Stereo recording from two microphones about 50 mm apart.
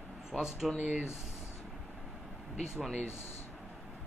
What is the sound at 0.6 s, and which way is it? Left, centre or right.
Speech, centre.